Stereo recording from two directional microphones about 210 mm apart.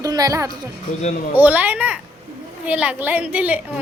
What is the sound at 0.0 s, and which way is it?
A woman's voice, 15° right (ahead or behind).